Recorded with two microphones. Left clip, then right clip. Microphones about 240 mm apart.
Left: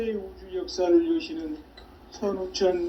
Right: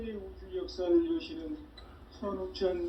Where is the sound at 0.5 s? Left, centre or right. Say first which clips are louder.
Left 7 dB; left.